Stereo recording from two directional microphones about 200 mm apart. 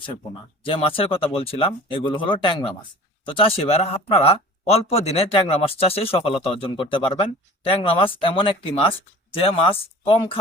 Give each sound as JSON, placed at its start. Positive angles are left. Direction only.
{"t": 0.6, "sound": "speech", "side_deg": 25}